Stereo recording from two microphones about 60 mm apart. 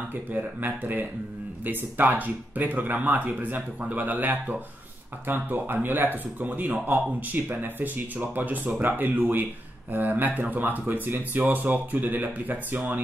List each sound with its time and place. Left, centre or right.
0.3 s speech: right